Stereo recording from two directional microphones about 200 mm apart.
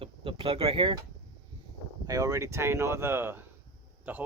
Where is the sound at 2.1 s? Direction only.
15° right (ahead or behind).